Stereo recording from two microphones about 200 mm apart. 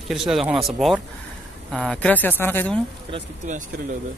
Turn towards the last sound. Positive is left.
turn(degrees=-40)  # may be behind; listen again after turning